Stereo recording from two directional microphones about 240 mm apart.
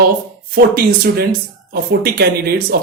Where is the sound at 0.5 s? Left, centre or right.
Right.